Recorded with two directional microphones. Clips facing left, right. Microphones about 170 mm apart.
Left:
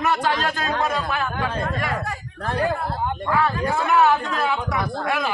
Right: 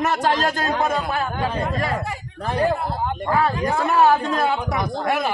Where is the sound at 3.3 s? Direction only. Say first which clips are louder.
Right 1 dB; 35° right (ahead or behind).